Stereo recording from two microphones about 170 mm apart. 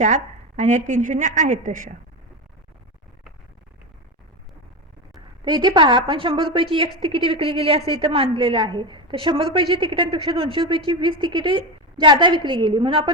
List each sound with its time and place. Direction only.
0.6 s a woman's voice: 45° right (ahead or behind)
5.5 s a woman's voice: 25° right (ahead or behind)